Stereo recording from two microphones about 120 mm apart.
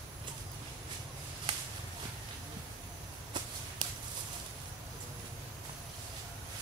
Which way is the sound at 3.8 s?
40° right (ahead or behind).